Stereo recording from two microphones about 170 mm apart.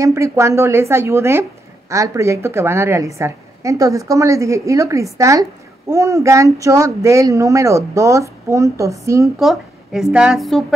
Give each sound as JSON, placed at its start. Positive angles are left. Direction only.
{"t": 0.0, "sound": "a woman's voice", "side_deg": -15}
{"t": 9.4, "sound": "a woman's voice", "side_deg": 0}